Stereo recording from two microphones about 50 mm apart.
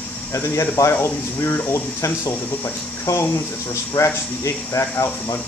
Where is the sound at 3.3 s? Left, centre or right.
Left.